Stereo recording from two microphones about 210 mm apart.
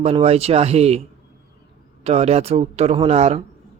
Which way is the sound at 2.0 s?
30° right (ahead or behind).